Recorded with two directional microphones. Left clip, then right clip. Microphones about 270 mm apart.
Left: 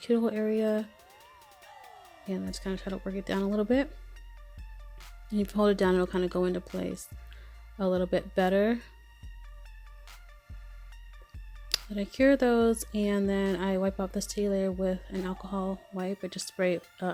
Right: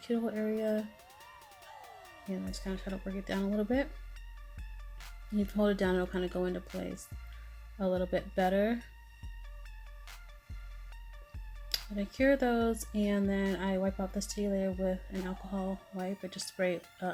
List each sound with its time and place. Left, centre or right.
0.0 s speech: left
1.1 s music: centre
2.5 s speech: left
5.3 s speech: left
11.7 s speech: left